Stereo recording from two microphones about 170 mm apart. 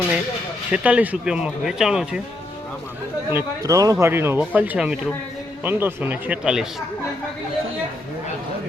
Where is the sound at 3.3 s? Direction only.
20° right (ahead or behind); by 6.8 s 5° right (ahead or behind).